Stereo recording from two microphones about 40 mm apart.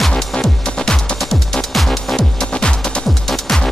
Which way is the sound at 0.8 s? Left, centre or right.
Left.